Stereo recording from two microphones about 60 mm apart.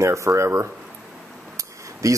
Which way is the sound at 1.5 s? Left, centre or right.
Right.